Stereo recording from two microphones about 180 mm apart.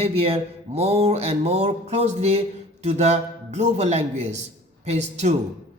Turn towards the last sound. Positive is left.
turn(degrees=-40)  # may be behind; listen again after turning